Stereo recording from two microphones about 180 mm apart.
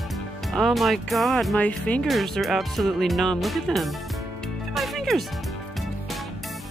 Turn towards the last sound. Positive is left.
turn(degrees=0)  # may be behind; listen again after turning